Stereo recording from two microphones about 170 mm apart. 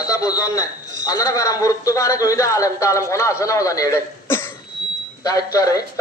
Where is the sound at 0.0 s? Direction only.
20° left (ahead or behind).